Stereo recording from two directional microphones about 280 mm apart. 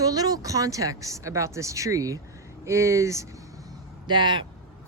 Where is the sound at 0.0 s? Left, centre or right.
Centre.